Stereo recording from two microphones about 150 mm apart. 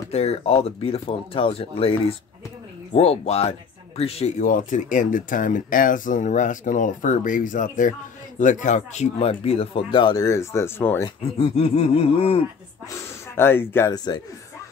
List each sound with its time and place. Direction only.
0.1 s speech: 45° left (ahead or behind)
4.4 s speech: 60° left (ahead or behind); by 11.1 s 15° left (ahead or behind)
11.3 s speech: 40° left (ahead or behind)
12.9 s speech: 15° left (ahead or behind)
13.9 s speech: 25° left (ahead or behind)